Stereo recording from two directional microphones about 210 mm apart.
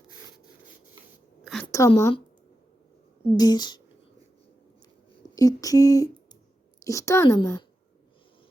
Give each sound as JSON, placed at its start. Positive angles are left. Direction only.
{"t": 1.6, "sound": "a sound", "side_deg": 15}
{"t": 2.0, "sound": "speech", "side_deg": 15}
{"t": 3.3, "sound": "speech", "side_deg": 20}
{"t": 5.3, "sound": "speech", "side_deg": 15}